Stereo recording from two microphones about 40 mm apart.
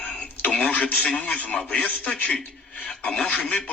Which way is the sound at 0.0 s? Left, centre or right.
Left.